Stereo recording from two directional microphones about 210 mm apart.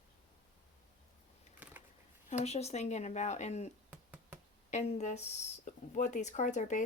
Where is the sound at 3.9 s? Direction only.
10° right (ahead or behind).